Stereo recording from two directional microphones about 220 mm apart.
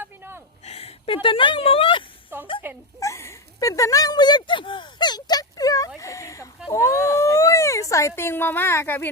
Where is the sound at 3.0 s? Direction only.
15° left (ahead or behind).